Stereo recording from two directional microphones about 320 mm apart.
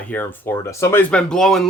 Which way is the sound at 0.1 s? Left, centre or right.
Centre.